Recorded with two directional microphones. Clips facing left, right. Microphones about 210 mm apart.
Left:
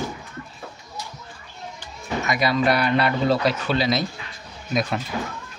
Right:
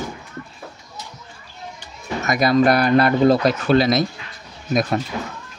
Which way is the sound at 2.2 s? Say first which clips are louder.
Right 5 dB; 45° right (ahead or behind).